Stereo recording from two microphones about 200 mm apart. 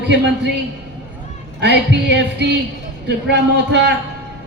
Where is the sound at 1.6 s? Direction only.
60° right (ahead or behind).